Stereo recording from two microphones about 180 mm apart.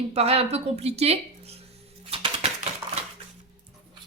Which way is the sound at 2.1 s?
30° right (ahead or behind).